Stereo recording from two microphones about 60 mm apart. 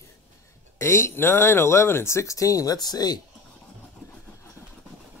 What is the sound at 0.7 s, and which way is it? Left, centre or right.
Speech, left.